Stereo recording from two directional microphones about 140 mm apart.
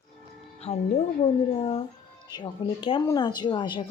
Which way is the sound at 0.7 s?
50° left (ahead or behind).